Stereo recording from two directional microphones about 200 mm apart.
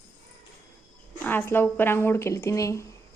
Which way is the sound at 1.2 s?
10° left (ahead or behind).